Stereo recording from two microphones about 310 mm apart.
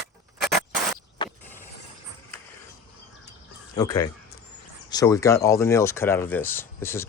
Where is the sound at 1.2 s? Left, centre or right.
Centre.